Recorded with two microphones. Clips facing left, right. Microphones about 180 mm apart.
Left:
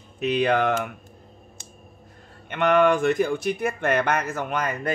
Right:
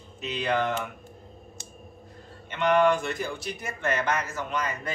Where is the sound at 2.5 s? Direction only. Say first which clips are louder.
Left 3 dB; 60° left (ahead or behind).